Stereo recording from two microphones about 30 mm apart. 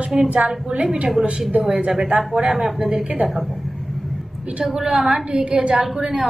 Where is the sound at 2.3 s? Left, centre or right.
Right.